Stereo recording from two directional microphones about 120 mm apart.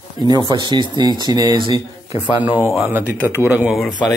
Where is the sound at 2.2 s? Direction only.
15° right (ahead or behind).